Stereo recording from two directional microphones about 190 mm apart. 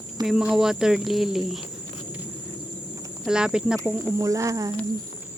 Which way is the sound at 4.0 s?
15° right (ahead or behind).